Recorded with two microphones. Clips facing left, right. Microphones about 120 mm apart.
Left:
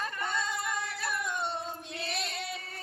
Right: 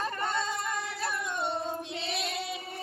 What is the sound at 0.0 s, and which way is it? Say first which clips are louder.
Singing: right 3 dB; 30° right (ahead or behind).